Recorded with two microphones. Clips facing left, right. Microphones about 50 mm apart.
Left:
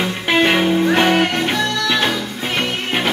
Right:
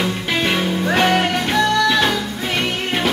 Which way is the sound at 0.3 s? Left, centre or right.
Left.